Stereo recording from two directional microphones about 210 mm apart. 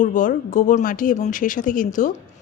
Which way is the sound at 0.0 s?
40° left (ahead or behind).